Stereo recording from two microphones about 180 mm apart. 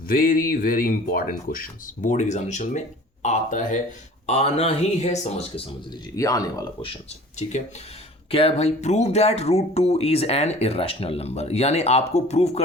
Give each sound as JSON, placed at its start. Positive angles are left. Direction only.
{"t": 0.1, "sound": "speech", "side_deg": 50}
{"t": 6.1, "sound": "speech", "side_deg": 20}